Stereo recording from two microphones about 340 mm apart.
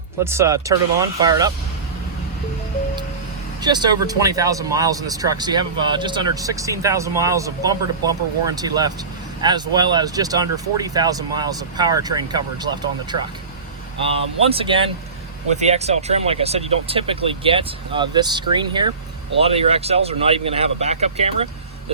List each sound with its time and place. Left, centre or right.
0.3 s speech: centre
3.6 s speech: centre
14.5 s speech: centre